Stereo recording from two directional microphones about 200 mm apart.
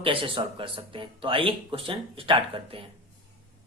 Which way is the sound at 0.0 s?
25° right (ahead or behind).